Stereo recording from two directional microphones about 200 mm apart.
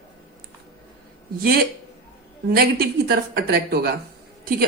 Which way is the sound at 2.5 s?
50° right (ahead or behind).